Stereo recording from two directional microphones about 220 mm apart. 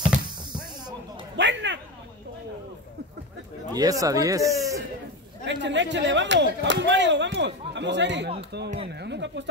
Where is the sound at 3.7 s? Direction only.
15° right (ahead or behind).